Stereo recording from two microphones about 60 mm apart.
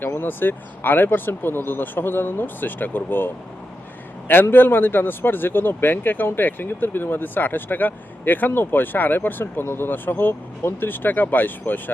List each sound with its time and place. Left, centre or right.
0.0 s speech: left
4.3 s speech: left